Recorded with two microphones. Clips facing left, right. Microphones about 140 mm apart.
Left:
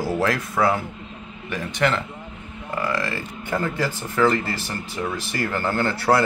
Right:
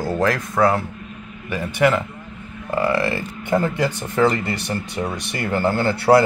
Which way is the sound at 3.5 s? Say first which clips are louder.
Right 5 dB; 25° right (ahead or behind).